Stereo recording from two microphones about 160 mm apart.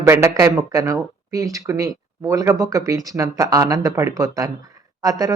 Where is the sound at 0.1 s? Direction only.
20° right (ahead or behind).